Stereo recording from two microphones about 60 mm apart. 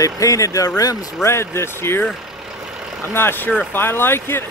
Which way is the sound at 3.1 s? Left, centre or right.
Left.